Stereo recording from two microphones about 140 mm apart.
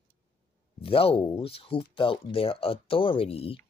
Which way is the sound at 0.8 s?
40° left (ahead or behind).